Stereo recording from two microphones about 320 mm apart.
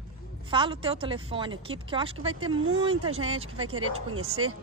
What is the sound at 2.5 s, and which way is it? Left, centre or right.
Speech, right.